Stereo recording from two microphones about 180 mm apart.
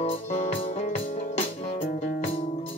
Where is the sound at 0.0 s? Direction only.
35° left (ahead or behind).